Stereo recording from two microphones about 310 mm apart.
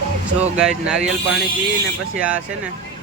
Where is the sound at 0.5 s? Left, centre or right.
Centre.